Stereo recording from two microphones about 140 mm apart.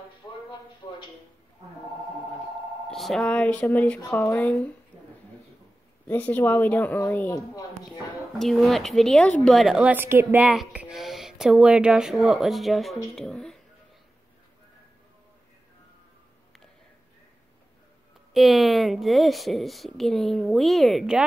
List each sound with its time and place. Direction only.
0.8 s a sound: 30° left (ahead or behind)
2.9 s speech: centre (ahead or behind)
6.0 s speech: 10° left (ahead or behind)
8.4 s a woman's voice: centre (ahead or behind)
18.3 s a woman's voice: centre (ahead or behind)